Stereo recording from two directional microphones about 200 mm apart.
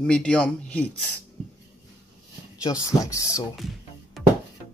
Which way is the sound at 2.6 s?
20° left (ahead or behind).